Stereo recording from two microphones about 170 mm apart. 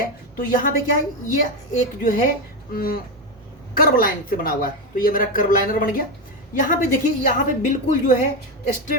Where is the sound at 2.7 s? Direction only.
60° left (ahead or behind).